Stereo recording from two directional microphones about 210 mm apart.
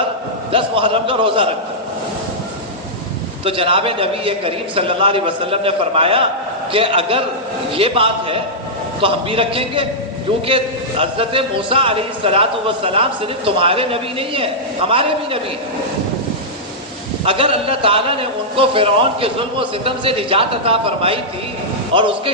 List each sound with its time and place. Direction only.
0.5 s a man's voice: 25° right (ahead or behind)
3.4 s a man's voice: 25° right (ahead or behind)
17.2 s a man's voice: 25° right (ahead or behind)